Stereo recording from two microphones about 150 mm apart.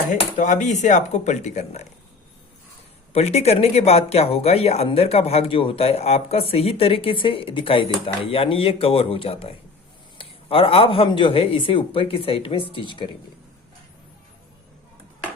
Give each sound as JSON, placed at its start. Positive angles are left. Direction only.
{"t": 0.1, "sound": "speech", "side_deg": 55}
{"t": 3.1, "sound": "speech", "side_deg": 45}